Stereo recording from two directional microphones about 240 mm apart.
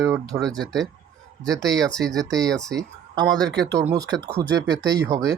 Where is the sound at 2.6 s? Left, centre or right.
Centre.